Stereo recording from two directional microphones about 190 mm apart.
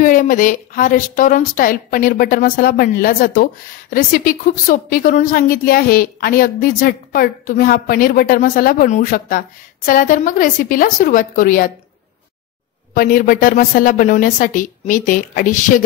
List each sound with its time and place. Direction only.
0.0 s a woman's voice: 45° left (ahead or behind)
12.9 s a woman's voice: 45° left (ahead or behind)